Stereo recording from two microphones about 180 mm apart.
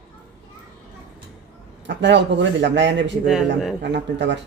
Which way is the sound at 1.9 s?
80° right.